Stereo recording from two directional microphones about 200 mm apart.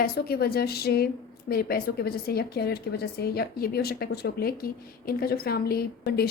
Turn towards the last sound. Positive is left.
turn(degrees=50)  # may be behind; listen again after turning